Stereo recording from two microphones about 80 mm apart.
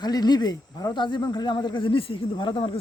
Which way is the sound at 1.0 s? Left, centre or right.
Left.